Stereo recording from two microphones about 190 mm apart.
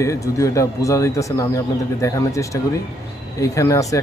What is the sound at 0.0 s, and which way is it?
Speech, 15° left (ahead or behind).